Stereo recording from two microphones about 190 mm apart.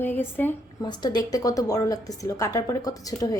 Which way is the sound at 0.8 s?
20° left (ahead or behind).